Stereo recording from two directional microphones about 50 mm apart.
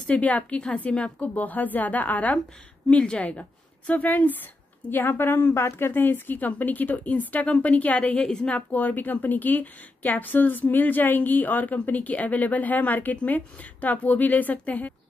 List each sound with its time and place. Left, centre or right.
0.0 s a woman's voice: left
1.3 s a woman's voice: left
8.2 s a woman's voice: centre
8.5 s a woman's voice: left